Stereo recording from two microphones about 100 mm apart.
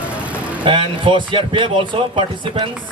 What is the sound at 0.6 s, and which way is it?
Speech, 55° right (ahead or behind).